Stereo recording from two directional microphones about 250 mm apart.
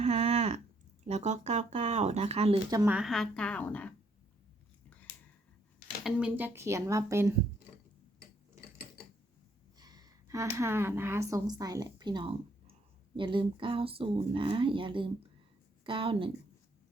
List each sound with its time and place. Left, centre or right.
0.0 s a sound: right
1.0 s speech: right; by 3.9 s centre
6.0 s speech: centre
9.7 s speech: centre